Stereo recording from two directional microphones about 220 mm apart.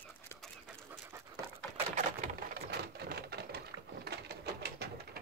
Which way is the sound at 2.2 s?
45° right (ahead or behind).